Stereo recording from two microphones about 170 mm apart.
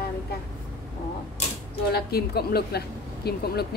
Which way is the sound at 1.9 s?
65° left (ahead or behind).